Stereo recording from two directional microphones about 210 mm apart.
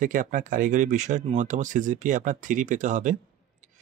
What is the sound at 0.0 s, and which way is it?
Speech, 40° right (ahead or behind).